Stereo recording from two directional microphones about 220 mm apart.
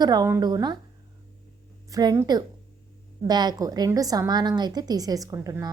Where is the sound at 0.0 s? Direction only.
15° right (ahead or behind).